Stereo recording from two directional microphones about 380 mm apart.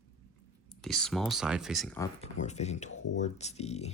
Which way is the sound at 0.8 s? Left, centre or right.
Centre.